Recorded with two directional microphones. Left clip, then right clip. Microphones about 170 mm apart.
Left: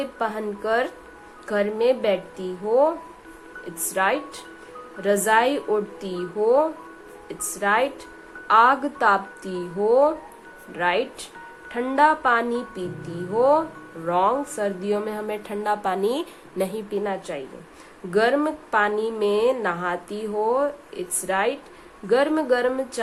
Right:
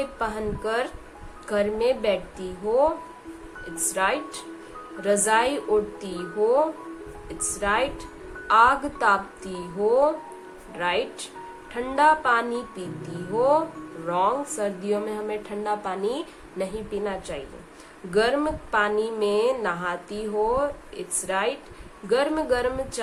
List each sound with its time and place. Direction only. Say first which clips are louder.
0.0 s a woman's voice: left 1 dB; 30° left (ahead or behind)